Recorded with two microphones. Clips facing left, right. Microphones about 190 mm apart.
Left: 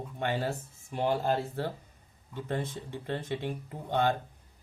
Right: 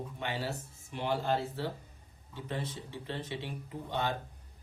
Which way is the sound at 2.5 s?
50° left (ahead or behind).